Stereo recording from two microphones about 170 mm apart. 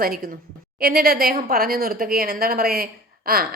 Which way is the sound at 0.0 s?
60° right (ahead or behind).